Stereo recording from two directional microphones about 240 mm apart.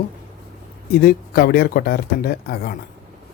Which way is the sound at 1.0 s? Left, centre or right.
Left.